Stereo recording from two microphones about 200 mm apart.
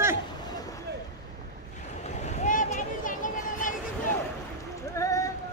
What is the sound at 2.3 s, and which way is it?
Vehicle, 40° left (ahead or behind).